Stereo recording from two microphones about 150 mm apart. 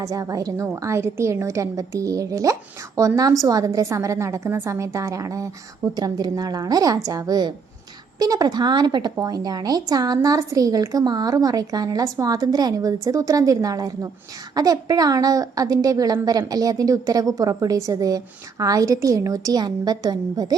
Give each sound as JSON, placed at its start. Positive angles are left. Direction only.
{"t": 0.0, "sound": "a woman's voice", "side_deg": -20}